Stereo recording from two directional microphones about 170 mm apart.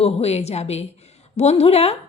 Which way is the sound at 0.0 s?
35° left (ahead or behind).